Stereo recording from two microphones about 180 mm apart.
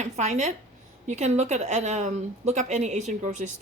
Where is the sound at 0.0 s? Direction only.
40° right (ahead or behind).